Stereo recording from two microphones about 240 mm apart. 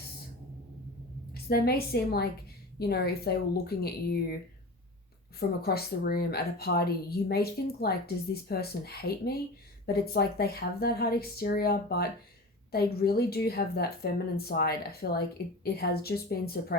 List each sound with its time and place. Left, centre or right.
1.3 s a woman's voice: left
5.4 s a woman's voice: left